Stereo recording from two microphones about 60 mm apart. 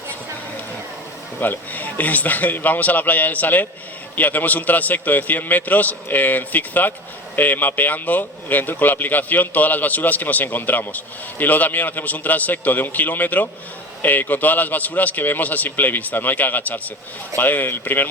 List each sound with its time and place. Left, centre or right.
1.4 s speech: left